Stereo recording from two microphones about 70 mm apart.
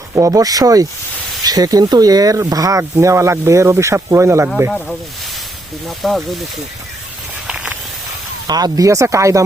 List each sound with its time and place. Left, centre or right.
0.2 s speech: right
6.0 s speech: centre
7.4 s a sound: centre
8.4 s speech: right